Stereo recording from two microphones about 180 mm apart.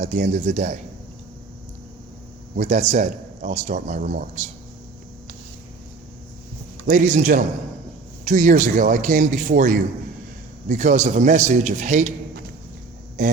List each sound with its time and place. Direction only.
0.0 s a man's voice: 40° right (ahead or behind)
2.6 s a man's voice: 40° right (ahead or behind)
6.8 s a man's voice: 45° right (ahead or behind)
13.2 s speech: 45° right (ahead or behind)